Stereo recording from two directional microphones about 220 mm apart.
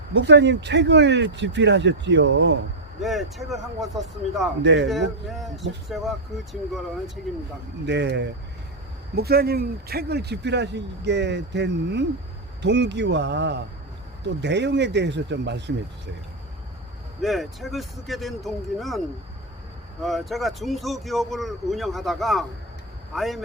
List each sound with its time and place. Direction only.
0.1 s a man's voice: 50° right (ahead or behind)
3.0 s speech: centre (ahead or behind)
4.6 s a man's voice: 50° right (ahead or behind)
5.2 s speech: centre (ahead or behind)
7.9 s a man's voice: 50° right (ahead or behind)
17.2 s speech: centre (ahead or behind)